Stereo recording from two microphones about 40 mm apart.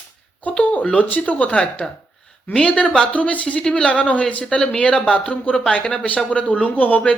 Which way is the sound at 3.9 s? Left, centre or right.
Left.